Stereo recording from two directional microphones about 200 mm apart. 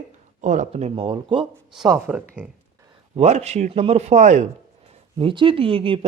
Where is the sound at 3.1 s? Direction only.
30° right (ahead or behind).